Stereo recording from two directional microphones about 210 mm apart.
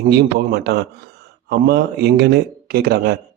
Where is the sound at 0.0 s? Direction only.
50° right (ahead or behind).